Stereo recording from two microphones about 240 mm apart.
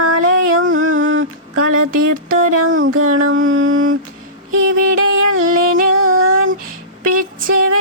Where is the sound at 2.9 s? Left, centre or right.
Right.